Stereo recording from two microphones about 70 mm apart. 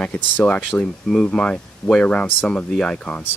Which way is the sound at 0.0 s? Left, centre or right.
Centre.